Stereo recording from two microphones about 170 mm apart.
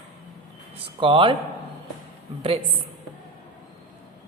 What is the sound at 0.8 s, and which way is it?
Speech, 30° right (ahead or behind).